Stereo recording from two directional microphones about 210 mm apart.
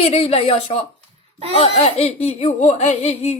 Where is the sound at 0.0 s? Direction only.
30° left (ahead or behind).